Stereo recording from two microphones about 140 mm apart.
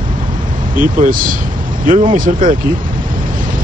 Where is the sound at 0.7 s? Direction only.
75° right (ahead or behind).